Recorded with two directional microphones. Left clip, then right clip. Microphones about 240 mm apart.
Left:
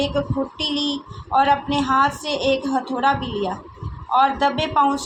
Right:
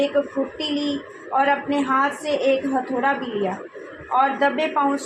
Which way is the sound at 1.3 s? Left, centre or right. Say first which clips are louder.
Left 2 dB; left.